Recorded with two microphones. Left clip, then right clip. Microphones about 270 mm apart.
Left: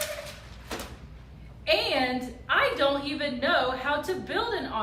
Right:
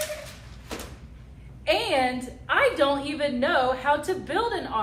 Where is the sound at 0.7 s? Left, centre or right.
Centre.